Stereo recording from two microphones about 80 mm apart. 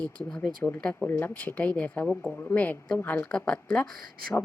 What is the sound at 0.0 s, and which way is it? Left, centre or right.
Speech, centre.